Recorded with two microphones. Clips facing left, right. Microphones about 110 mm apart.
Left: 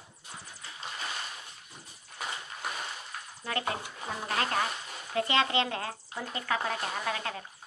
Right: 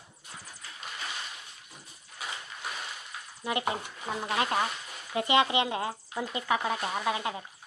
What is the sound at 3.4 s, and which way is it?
Speech, 20° right (ahead or behind).